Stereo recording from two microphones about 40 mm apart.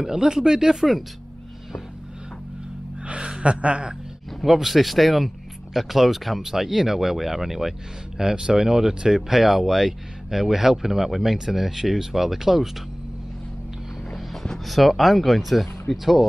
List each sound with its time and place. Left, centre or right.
0.0 s speech: centre
3.0 s speech: right
4.3 s a sound: centre
4.6 s speech: centre
14.6 s speech: centre